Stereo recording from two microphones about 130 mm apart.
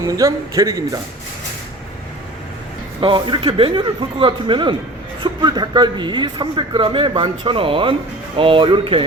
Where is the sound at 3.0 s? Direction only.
40° right (ahead or behind).